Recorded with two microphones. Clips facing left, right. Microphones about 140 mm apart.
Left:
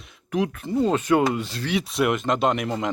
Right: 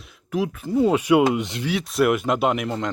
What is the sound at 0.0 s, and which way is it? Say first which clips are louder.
Speech: even; centre (ahead or behind).